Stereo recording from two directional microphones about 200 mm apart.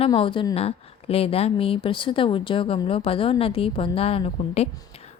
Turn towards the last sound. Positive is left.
turn(degrees=30)  # may be behind; listen again after turning